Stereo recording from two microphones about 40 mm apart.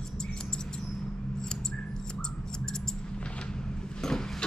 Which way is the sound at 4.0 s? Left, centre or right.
Centre.